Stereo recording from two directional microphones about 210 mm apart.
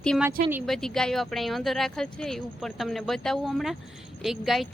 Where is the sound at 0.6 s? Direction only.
Centre (ahead or behind).